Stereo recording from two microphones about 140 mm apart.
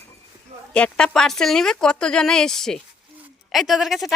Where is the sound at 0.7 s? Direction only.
5° left (ahead or behind).